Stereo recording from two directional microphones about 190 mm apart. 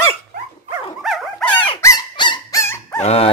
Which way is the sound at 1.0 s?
Centre (ahead or behind).